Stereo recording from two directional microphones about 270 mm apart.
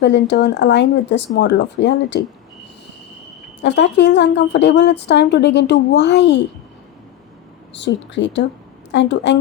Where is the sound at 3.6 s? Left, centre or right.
Left.